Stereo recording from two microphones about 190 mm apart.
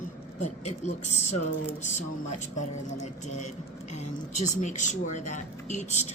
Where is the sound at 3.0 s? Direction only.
40° left (ahead or behind).